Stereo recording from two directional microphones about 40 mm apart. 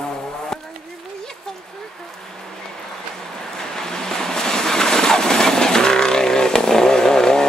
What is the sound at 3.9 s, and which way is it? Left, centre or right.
Vehicle, centre.